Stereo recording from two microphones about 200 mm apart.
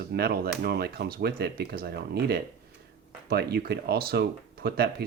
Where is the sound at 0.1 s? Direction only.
50° right (ahead or behind).